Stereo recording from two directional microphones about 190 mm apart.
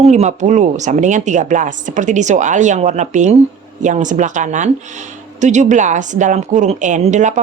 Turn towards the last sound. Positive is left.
turn(degrees=-40)  # may be behind; listen again after turning